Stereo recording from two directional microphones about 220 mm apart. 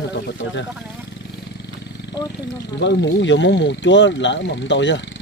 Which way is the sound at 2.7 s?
55° left (ahead or behind).